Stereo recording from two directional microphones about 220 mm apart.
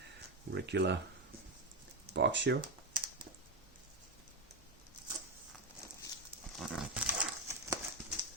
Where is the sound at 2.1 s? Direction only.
55° right (ahead or behind).